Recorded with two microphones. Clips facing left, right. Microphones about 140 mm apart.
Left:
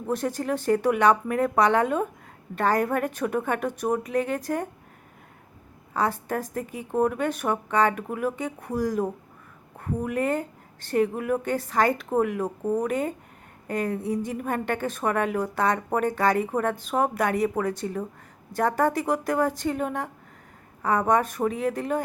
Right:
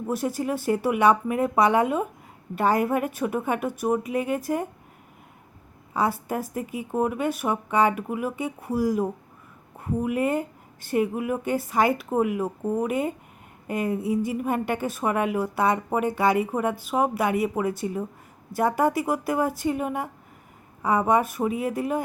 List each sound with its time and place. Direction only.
0.1 s a woman's voice: 10° right (ahead or behind)
5.9 s a woman's voice: 10° right (ahead or behind)